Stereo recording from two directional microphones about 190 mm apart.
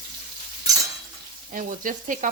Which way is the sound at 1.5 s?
45° right (ahead or behind).